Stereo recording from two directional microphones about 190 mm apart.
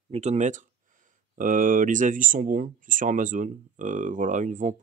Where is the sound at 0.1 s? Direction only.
35° right (ahead or behind).